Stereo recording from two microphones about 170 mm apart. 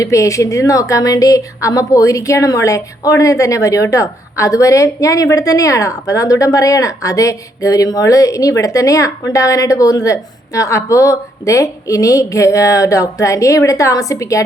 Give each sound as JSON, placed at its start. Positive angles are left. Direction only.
{"t": 0.0, "sound": "speech", "side_deg": 20}